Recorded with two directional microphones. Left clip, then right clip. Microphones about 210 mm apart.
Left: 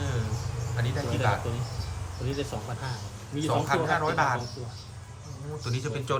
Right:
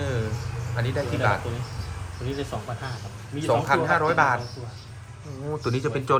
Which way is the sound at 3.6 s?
5° left (ahead or behind).